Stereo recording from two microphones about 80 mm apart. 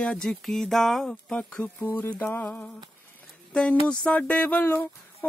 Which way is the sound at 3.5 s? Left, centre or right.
Centre.